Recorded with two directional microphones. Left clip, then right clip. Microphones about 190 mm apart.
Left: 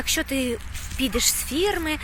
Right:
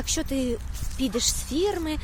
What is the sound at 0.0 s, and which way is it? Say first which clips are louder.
Speech: left 3 dB; centre (ahead or behind).